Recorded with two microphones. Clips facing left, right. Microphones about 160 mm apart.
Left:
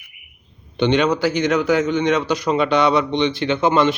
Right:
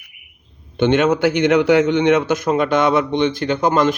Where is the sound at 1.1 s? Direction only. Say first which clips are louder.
Right 4 dB; 60° right (ahead or behind).